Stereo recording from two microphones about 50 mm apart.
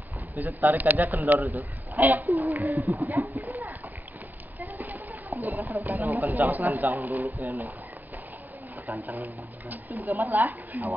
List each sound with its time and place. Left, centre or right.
0.4 s speech: right
3.1 s speech: right
4.6 s a sound: right
5.9 s speech: right
9.2 s speech: right